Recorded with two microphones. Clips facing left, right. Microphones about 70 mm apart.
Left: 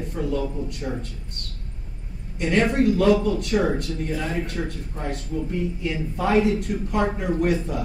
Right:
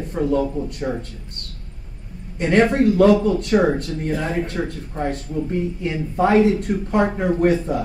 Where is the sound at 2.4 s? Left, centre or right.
Right.